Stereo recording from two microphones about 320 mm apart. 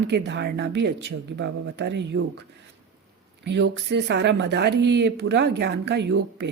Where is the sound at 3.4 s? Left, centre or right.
Right.